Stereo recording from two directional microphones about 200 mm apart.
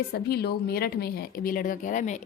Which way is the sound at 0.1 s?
50° left (ahead or behind).